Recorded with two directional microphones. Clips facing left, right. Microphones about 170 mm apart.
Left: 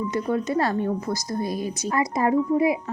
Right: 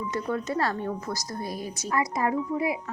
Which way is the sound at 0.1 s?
15° left (ahead or behind).